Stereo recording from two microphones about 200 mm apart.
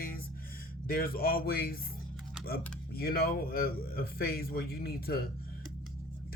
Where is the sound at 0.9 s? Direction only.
50° left (ahead or behind).